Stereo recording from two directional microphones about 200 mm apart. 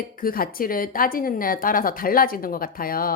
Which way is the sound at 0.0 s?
45° left (ahead or behind).